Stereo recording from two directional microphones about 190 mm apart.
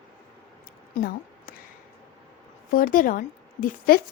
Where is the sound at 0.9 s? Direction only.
50° left (ahead or behind).